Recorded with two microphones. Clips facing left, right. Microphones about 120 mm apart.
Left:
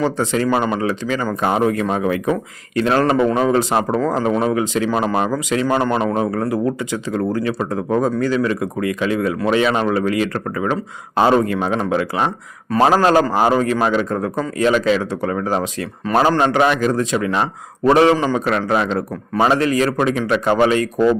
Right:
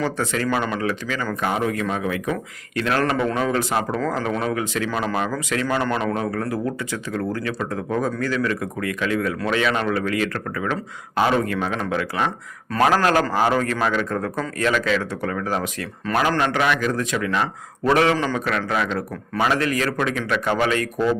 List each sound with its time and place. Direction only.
0.0 s speech: 20° left (ahead or behind)
4.2 s speech: 20° left (ahead or behind)